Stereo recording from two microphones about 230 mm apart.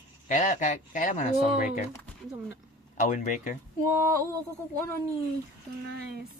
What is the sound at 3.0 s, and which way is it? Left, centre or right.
Speech, left.